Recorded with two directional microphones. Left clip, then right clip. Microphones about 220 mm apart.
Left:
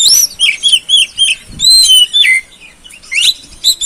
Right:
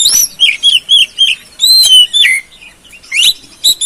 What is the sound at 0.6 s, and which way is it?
Chirp, 30° left (ahead or behind).